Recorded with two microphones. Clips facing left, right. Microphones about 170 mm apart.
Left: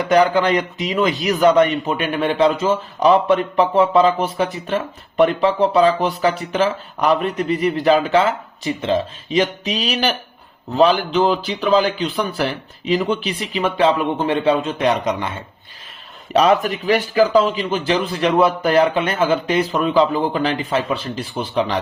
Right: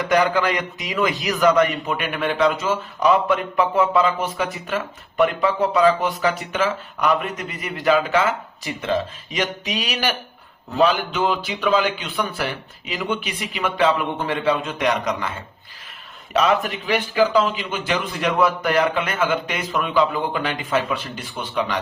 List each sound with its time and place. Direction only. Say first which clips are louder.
0.1 s a man's voice: left 5 dB; 30° left (ahead or behind)
16.3 s speech: left 4 dB; 35° left (ahead or behind)